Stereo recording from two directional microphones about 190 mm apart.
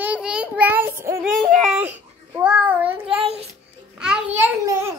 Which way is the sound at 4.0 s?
5° right (ahead or behind).